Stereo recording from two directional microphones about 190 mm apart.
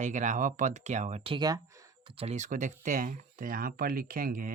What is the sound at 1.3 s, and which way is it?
Speech, 20° right (ahead or behind).